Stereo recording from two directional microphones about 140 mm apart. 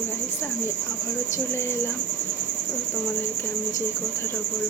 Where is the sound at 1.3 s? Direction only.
20° left (ahead or behind).